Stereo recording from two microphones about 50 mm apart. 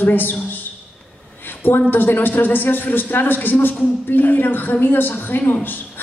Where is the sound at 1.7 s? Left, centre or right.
Left.